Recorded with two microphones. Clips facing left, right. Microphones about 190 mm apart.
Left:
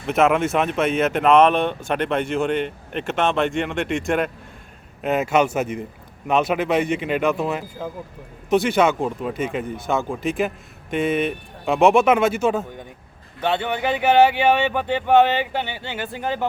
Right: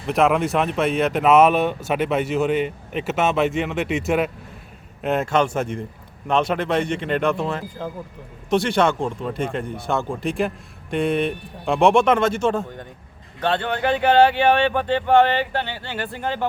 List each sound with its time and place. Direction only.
0.0 s speech: centre (ahead or behind)